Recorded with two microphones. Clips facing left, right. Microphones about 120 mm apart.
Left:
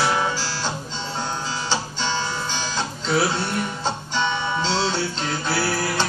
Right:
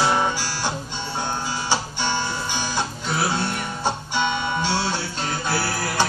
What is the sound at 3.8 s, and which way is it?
Guitar, 15° right (ahead or behind).